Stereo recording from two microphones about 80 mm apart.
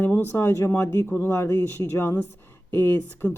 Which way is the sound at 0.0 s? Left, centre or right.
Left.